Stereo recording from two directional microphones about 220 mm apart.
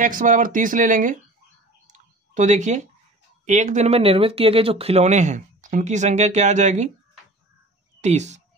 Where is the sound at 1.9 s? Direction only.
35° right (ahead or behind).